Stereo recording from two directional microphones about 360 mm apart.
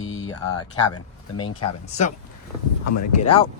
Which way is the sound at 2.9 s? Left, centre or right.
Left.